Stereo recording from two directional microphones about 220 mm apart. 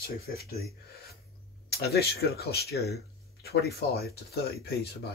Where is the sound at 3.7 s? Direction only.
45° left (ahead or behind).